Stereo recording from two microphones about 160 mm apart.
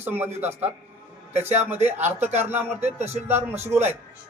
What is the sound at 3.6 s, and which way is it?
Speech, 15° right (ahead or behind).